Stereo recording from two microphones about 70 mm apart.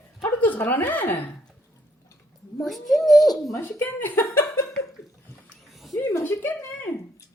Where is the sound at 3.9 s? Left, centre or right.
Left.